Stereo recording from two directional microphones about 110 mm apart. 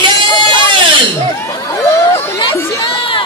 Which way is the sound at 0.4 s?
50° right (ahead or behind).